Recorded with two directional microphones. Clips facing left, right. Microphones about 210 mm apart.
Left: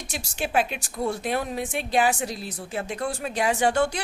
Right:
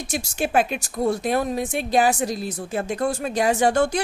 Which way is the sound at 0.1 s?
45° right (ahead or behind).